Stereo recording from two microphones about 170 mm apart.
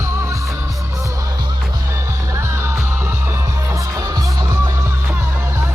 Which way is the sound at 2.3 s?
15° right (ahead or behind).